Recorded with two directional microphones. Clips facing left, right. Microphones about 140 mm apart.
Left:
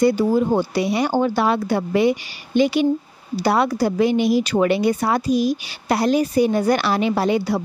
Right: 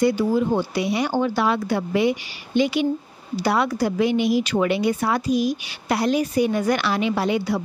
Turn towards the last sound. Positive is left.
turn(degrees=35)  # may be behind; listen again after turning